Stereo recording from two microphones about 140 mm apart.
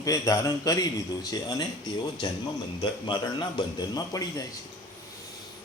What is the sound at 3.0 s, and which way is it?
Speech, 30° left (ahead or behind).